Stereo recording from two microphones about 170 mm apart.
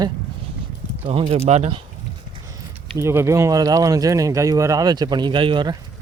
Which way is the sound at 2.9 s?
15° right (ahead or behind).